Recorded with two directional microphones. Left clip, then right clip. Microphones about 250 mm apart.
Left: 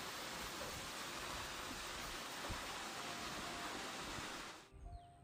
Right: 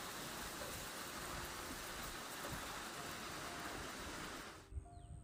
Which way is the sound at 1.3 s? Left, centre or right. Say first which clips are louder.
Left 1 dB; centre.